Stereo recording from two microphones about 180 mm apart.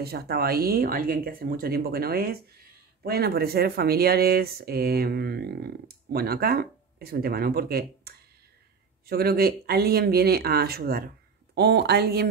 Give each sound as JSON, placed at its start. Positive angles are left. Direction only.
{"t": 0.0, "sound": "speech", "side_deg": -60}